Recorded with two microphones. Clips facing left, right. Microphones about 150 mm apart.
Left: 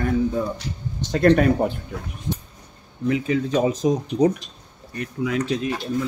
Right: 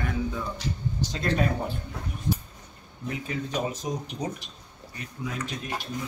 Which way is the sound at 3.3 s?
90° left.